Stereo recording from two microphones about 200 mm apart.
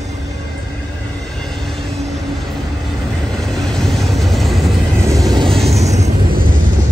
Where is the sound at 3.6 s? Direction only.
Centre (ahead or behind).